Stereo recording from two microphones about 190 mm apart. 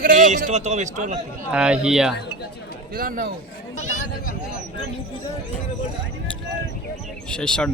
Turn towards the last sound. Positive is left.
turn(degrees=5)  # may be behind; listen again after turning